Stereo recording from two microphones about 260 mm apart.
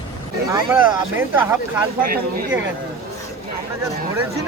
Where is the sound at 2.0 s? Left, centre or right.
Right.